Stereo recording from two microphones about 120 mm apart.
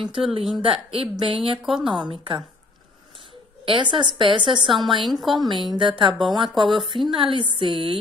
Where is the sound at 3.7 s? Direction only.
40° right (ahead or behind).